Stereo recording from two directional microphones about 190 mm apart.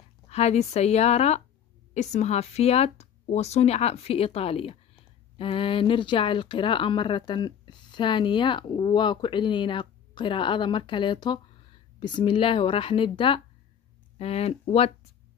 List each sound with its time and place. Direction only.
0.3 s speech: 35° left (ahead or behind)